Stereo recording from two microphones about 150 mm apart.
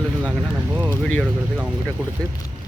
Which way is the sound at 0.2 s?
10° right (ahead or behind).